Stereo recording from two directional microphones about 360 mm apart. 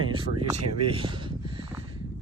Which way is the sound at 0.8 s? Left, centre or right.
Centre.